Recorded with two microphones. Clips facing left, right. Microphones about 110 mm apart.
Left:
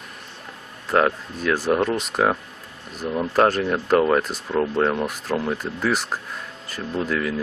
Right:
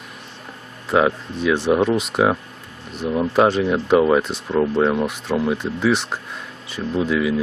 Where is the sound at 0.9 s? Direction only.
5° right (ahead or behind).